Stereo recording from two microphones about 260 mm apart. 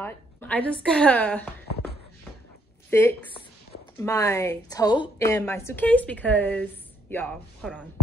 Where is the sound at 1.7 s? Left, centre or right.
Left.